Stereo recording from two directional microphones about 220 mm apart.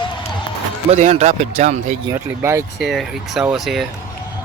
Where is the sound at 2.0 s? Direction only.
10° right (ahead or behind).